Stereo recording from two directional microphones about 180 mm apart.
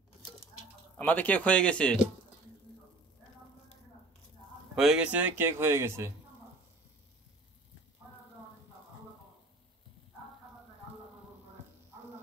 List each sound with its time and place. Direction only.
0.9 s speech: 10° left (ahead or behind)
4.7 s speech: 5° right (ahead or behind)